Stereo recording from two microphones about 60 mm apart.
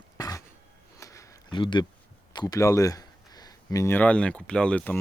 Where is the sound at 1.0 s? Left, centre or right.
Left.